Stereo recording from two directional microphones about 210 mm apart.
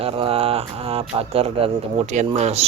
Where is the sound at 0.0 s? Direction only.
25° right (ahead or behind).